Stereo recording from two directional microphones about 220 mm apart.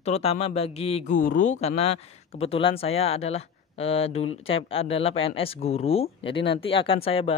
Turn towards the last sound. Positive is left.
turn(degrees=25)  # may be behind; listen again after turning